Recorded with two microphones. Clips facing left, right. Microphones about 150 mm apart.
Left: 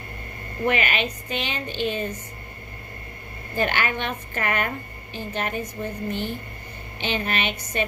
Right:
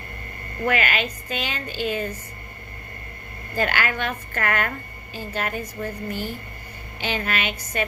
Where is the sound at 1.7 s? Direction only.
10° right (ahead or behind).